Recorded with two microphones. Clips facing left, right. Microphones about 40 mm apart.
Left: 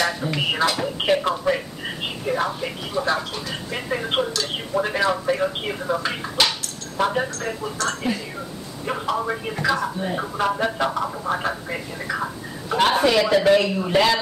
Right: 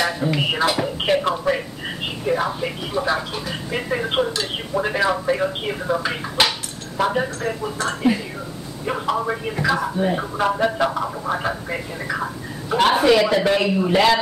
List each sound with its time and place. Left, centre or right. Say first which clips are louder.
0.0 s music: right 2 dB; centre
0.9 s speech: right 1 dB; centre
7.7 s speech: right 5 dB; centre
8.8 s speech: right 2 dB; centre